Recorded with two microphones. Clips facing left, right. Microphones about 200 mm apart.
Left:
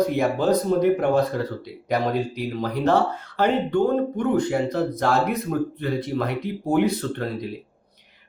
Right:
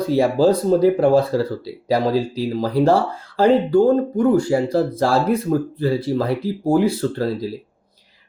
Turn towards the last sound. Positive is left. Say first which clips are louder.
# right 6 dB
turn(degrees=-30)  # may be behind; listen again after turning